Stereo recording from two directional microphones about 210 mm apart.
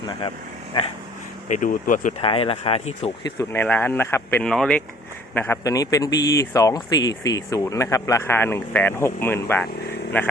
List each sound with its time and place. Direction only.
0.0 s speech: 20° left (ahead or behind)
1.5 s speech: 40° left (ahead or behind)
2.2 s speech: 25° left (ahead or behind)
3.2 s a man's voice: 15° left (ahead or behind)